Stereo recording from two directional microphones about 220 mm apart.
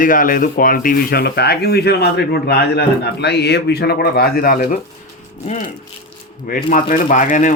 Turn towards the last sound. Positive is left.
turn(degrees=35)  # may be behind; listen again after turning